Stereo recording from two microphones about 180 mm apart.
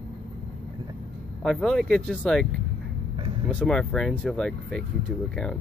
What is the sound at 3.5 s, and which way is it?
Speech, 5° left (ahead or behind).